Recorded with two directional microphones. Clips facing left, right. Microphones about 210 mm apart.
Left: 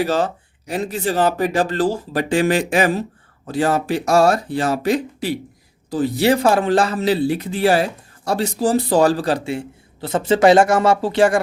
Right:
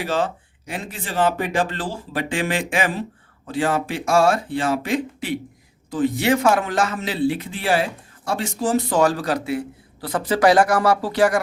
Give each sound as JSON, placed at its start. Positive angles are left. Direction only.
{"t": 0.0, "sound": "speech", "side_deg": 40}